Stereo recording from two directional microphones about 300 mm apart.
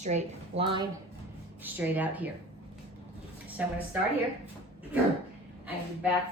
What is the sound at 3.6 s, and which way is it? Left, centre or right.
Speech, centre.